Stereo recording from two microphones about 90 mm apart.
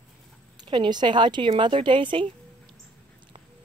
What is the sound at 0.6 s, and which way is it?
A woman's voice, 55° right (ahead or behind).